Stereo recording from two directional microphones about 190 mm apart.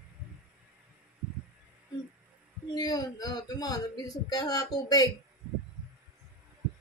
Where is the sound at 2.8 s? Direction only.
20° left (ahead or behind).